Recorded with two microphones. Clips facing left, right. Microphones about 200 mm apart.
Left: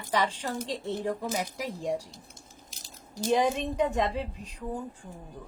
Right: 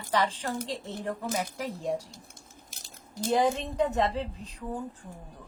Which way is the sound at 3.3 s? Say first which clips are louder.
Even; 15° left (ahead or behind).